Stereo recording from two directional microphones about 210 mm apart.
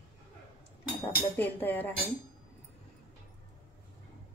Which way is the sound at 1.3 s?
10° left (ahead or behind).